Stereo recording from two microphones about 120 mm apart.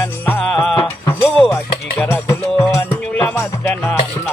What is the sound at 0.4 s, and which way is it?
Music, 5° left (ahead or behind).